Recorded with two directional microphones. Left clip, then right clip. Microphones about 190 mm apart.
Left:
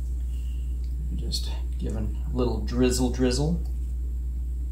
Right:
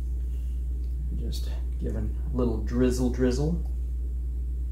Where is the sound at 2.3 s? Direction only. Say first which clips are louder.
Left 1 dB; 20° right (ahead or behind).